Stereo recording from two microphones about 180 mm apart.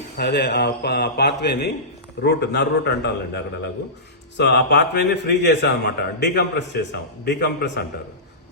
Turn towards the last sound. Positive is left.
turn(degrees=65)  # may be behind; listen again after turning